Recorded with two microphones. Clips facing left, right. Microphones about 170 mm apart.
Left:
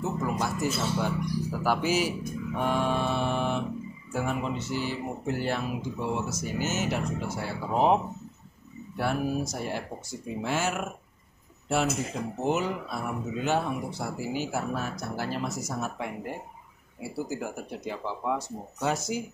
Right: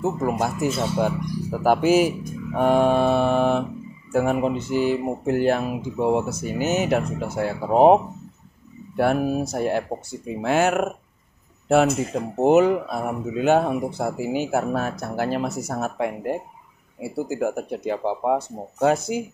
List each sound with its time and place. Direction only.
0.2 s speech: 50° right (ahead or behind)
12.4 s speech: 55° right (ahead or behind)